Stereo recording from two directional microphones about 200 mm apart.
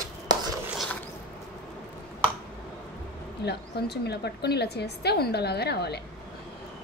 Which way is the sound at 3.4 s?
55° left (ahead or behind).